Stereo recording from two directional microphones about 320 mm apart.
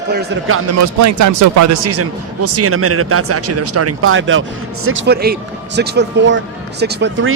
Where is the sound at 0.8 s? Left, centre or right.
Right.